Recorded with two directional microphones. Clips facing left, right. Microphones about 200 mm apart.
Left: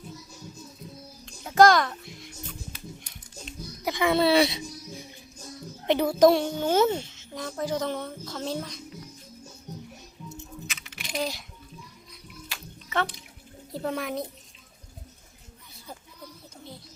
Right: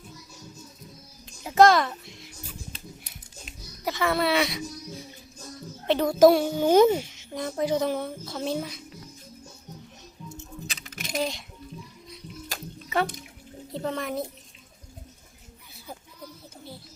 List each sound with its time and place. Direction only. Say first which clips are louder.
1.2 s music: even; 5° right (ahead or behind)
3.0 s a sound: left 3 dB; 5° right (ahead or behind)
3.8 s a sound: left 2 dB; 15° left (ahead or behind)
4.2 s a child's voice: left 4 dB; 30° left (ahead or behind)
5.8 s music: even; 15° left (ahead or behind)
6.1 s a child's voice: right 3 dB; centre (ahead or behind)
10.7 s coin: right 3 dB; 35° right (ahead or behind)
11.2 s a child's voice: right 2 dB; 5° left (ahead or behind)
12.5 s music: right 6 dB; 45° right (ahead or behind)
13.7 s a child's voice: even; 5° left (ahead or behind)